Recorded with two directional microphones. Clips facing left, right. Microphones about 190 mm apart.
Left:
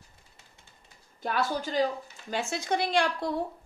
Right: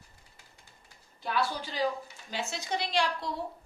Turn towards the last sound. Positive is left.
turn(degrees=50)  # may be behind; listen again after turning